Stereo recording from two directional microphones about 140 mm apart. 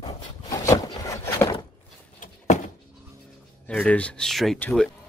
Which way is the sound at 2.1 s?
60° left (ahead or behind).